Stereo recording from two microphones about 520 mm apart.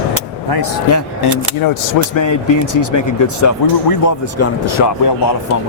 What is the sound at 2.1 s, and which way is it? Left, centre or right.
A man's voice, left.